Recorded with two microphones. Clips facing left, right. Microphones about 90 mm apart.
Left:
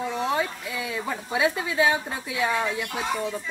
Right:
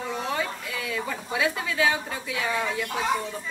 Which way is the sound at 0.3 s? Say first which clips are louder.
Left 3 dB; 20° left (ahead or behind).